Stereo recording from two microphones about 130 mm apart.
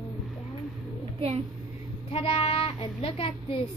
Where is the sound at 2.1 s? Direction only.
50° left (ahead or behind).